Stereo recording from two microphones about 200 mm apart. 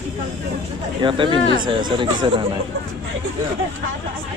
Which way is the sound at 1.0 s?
25° right (ahead or behind).